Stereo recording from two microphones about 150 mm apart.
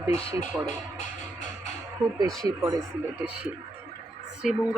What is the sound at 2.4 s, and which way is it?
Speech, 25° right (ahead or behind).